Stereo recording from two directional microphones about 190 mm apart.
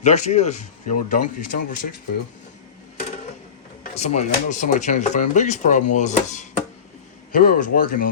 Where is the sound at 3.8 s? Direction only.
35° left (ahead or behind).